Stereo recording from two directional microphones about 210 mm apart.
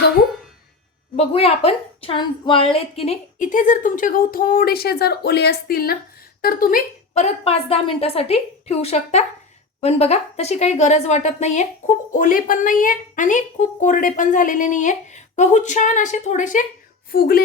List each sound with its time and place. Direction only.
1.1 s speech: 30° left (ahead or behind); by 17.4 s 45° left (ahead or behind)